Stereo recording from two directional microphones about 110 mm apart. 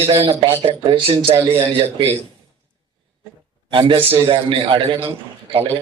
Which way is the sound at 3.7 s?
50° right (ahead or behind).